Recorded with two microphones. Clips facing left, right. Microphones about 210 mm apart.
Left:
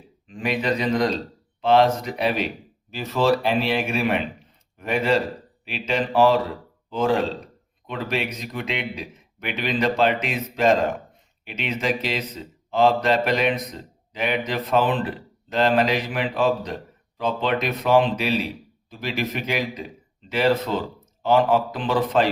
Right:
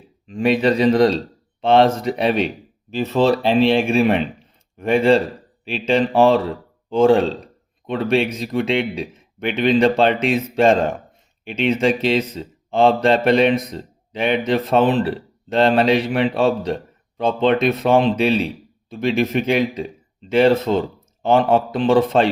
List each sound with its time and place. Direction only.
0.3 s a man's voice: 30° right (ahead or behind)